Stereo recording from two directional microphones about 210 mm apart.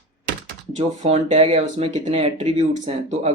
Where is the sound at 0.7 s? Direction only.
35° right (ahead or behind).